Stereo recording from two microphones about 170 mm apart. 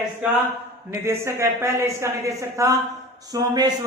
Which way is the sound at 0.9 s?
15° right (ahead or behind).